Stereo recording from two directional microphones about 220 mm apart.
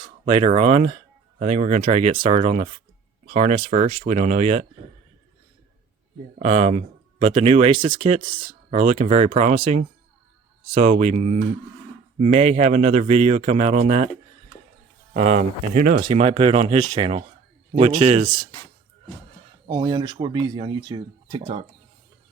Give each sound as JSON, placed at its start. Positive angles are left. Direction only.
{"t": 0.0, "sound": "speech", "side_deg": -25}
{"t": 6.4, "sound": "speech", "side_deg": -30}
{"t": 15.1, "sound": "speech", "side_deg": -30}
{"t": 16.0, "sound": "speech", "side_deg": -25}
{"t": 19.6, "sound": "speech", "side_deg": -20}